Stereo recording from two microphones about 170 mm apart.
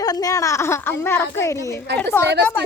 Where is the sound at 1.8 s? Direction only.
80° right.